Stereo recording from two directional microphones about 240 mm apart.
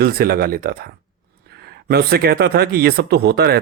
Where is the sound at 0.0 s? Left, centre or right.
Right.